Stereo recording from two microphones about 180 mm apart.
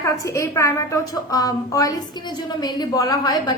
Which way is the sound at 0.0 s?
15° left (ahead or behind).